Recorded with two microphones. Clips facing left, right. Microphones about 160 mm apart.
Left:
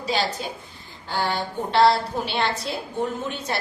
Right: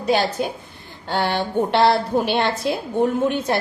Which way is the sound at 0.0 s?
55° right (ahead or behind).